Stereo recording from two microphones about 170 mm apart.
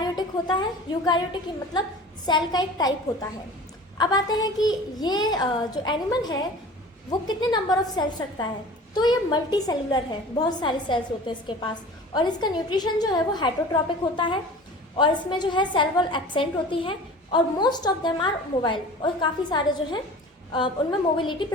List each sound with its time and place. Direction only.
0.0 s a woman's voice: 25° left (ahead or behind)
14.9 s a woman's voice: 30° left (ahead or behind)
21.2 s a woman's voice: 30° left (ahead or behind)